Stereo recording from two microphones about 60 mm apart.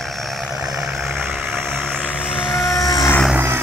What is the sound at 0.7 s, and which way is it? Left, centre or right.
Vehicle, centre.